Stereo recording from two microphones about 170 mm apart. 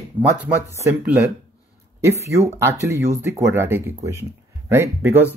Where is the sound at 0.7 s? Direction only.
15° right (ahead or behind).